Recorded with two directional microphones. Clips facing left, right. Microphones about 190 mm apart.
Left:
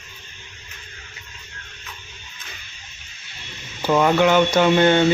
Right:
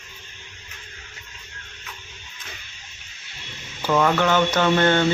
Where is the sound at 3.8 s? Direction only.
20° left (ahead or behind).